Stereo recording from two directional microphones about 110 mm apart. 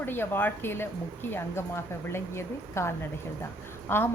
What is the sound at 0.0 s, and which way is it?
A woman's voice, 20° left (ahead or behind).